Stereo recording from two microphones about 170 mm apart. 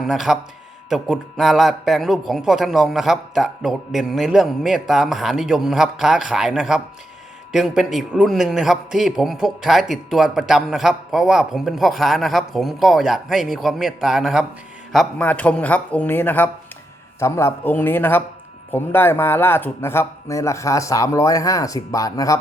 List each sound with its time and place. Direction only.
0.0 s a man's voice: centre (ahead or behind)
14.9 s a man's voice: 10° left (ahead or behind)